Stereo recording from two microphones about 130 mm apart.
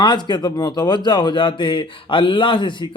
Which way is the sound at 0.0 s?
35° left (ahead or behind).